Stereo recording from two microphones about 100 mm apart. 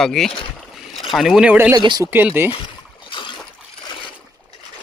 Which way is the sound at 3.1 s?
55° left (ahead or behind).